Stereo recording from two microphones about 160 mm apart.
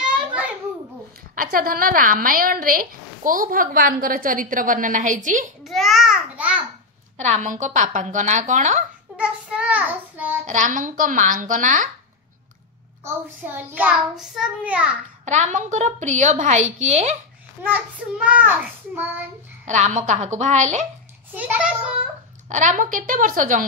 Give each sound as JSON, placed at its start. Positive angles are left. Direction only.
{"t": 0.0, "sound": "a sound", "side_deg": -5}
{"t": 1.3, "sound": "a woman's voice", "side_deg": -60}
{"t": 5.6, "sound": "babbling", "side_deg": 0}
{"t": 7.2, "sound": "a woman's voice", "side_deg": -45}
{"t": 9.1, "sound": "a sound", "side_deg": -10}
{"t": 10.4, "sound": "a woman's voice", "side_deg": -50}
{"t": 13.0, "sound": "a child's voice", "side_deg": -15}
{"t": 14.1, "sound": "a child's voice", "side_deg": -5}
{"t": 15.2, "sound": "a woman's voice", "side_deg": -45}
{"t": 17.6, "sound": "a child's voice", "side_deg": -10}
{"t": 19.6, "sound": "a woman's voice", "side_deg": -50}
{"t": 21.4, "sound": "a child's voice", "side_deg": -10}
{"t": 22.5, "sound": "a woman's voice", "side_deg": -50}